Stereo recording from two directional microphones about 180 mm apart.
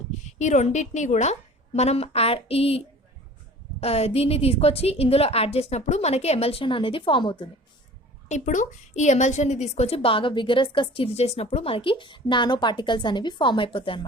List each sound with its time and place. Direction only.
0.1 s a woman's voice: 40° left (ahead or behind)
8.3 s a woman's voice: 40° left (ahead or behind)